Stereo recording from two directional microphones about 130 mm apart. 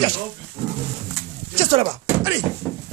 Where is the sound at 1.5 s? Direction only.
45° right (ahead or behind).